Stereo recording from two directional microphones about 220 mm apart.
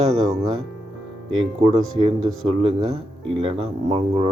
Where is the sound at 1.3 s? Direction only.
25° right (ahead or behind).